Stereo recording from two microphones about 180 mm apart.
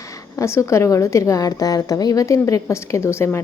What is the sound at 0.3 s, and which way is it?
A woman's voice, 15° left (ahead or behind).